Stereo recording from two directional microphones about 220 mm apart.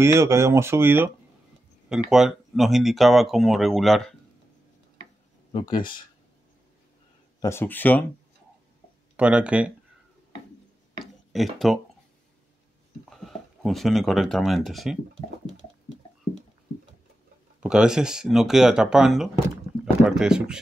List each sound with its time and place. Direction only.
0.0 s speech: 10° right (ahead or behind)
5.5 s speech: 20° left (ahead or behind)
7.4 s speech: 10° left (ahead or behind)
9.1 s speech: 5° right (ahead or behind)
11.3 s speech: centre (ahead or behind)
13.1 s speech: centre (ahead or behind)
17.6 s speech: 5° right (ahead or behind)